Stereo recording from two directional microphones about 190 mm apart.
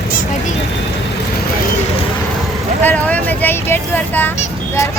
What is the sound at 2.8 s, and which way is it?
Speech, 10° left (ahead or behind).